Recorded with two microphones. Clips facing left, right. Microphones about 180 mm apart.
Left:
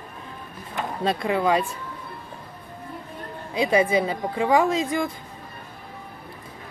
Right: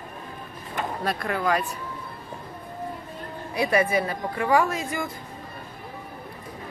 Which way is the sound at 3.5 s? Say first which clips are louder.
Left 2 dB; 20° left (ahead or behind).